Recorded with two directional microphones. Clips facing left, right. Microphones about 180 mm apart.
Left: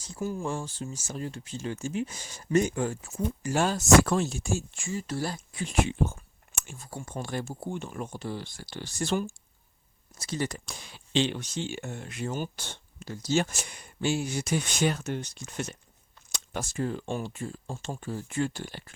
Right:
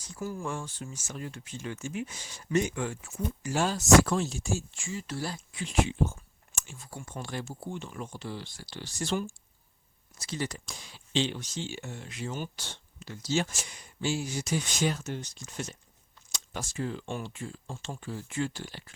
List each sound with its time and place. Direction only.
0.0 s speech: 25° left (ahead or behind)
0.4 s speech: 30° left (ahead or behind)
2.1 s speech: 45° left (ahead or behind)
6.7 s speech: 40° left (ahead or behind)